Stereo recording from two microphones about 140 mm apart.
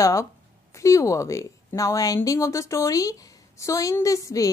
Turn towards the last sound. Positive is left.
turn(degrees=25)  # may be behind; listen again after turning